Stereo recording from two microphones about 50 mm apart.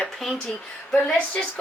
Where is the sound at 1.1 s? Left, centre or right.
Centre.